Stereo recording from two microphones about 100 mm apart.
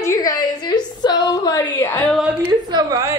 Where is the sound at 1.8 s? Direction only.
20° left (ahead or behind).